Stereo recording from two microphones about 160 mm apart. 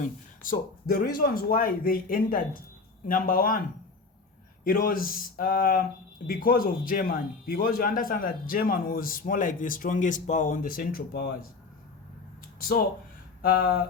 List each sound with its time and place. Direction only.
0.0 s speech: 60° left (ahead or behind)
4.6 s speech: 65° left (ahead or behind); by 11.4 s 80° left
12.4 s a sound: 65° left (ahead or behind)
13.4 s speech: 65° left (ahead or behind)